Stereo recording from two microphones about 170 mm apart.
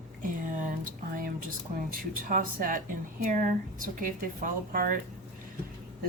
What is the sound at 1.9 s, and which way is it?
A woman's voice, 55° right (ahead or behind).